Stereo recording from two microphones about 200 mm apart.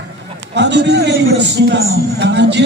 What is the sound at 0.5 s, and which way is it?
Speech, 60° right (ahead or behind).